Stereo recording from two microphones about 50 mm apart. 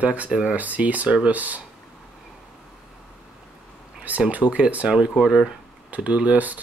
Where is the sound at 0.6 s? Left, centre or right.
Right.